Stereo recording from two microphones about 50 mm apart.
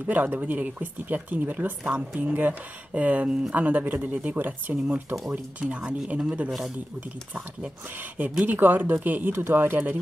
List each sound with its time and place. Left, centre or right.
0.0 s speech: right
8.5 s speech: right
9.3 s speech: right